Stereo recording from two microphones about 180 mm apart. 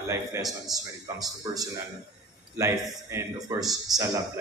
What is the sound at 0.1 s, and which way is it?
A man's voice, 20° right (ahead or behind).